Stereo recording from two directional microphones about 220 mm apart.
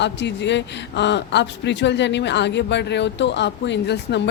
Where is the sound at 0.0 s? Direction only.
50° left (ahead or behind).